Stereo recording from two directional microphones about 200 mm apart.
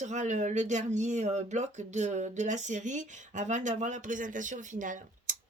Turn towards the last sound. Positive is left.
turn(degrees=-40)  # may be behind; listen again after turning